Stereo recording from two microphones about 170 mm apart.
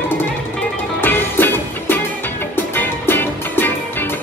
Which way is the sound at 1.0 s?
10° left (ahead or behind).